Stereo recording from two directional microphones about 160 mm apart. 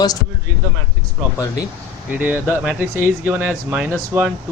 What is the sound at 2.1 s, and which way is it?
Speech, 10° right (ahead or behind).